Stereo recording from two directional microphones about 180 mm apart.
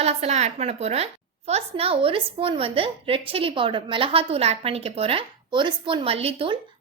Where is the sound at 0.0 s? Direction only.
35° right (ahead or behind).